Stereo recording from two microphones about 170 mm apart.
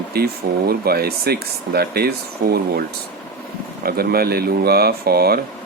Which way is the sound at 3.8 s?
65° right (ahead or behind).